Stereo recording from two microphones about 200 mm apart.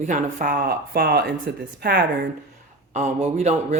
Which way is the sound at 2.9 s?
35° right (ahead or behind).